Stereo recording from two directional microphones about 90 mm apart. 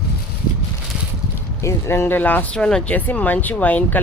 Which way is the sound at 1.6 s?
30° left (ahead or behind).